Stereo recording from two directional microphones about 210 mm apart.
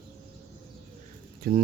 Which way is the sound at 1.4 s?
45° right (ahead or behind).